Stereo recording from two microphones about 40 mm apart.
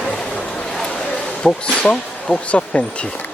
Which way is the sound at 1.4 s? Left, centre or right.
Left.